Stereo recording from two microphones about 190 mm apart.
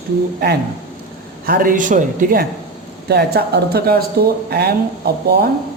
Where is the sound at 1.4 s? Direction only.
50° right (ahead or behind).